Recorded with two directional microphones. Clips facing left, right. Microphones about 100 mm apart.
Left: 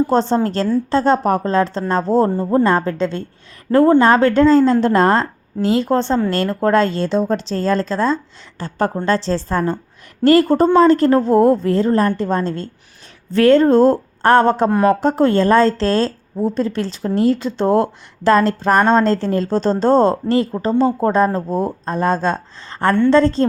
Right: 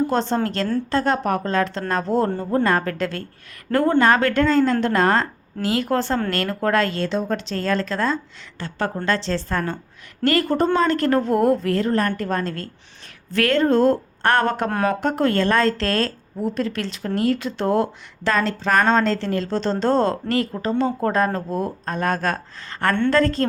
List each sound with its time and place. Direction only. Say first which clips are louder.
0.1 s speech: left 5 dB; 35° left (ahead or behind)
3.7 s speech: left 7 dB; 10° left (ahead or behind)
4.0 s speech: left 5 dB; 30° left (ahead or behind)
14.7 s speech: left 7 dB; 5° left (ahead or behind)
15.0 s speech: left 5 dB; 30° left (ahead or behind)